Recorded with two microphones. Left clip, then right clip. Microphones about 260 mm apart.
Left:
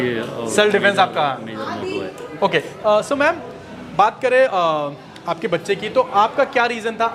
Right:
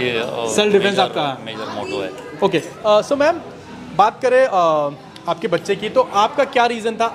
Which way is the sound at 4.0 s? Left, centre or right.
Centre.